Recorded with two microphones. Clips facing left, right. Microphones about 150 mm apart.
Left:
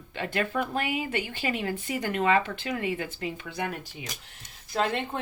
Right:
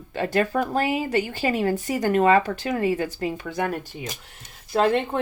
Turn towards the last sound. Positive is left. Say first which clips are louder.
# right 7 dB
turn(degrees=-50)  # may be behind; listen again after turning